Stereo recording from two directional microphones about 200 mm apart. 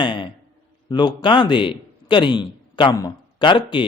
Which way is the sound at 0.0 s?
25° left (ahead or behind).